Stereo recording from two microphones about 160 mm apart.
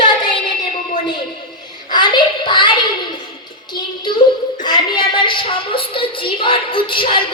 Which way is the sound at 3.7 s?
30° left (ahead or behind).